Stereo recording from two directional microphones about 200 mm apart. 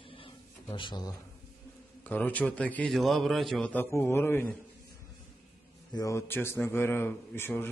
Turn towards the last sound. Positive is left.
turn(degrees=10)  # may be behind; listen again after turning